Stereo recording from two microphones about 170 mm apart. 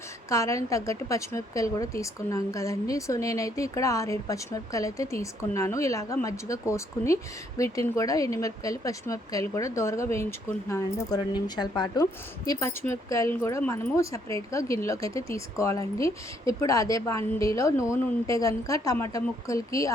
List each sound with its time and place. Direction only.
0.3 s a woman's voice: 20° left (ahead or behind)